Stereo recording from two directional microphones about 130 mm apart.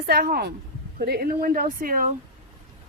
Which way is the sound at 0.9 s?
90° right.